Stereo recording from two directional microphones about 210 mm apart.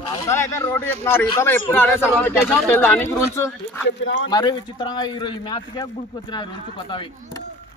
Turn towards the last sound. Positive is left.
turn(degrees=25)  # may be behind; listen again after turning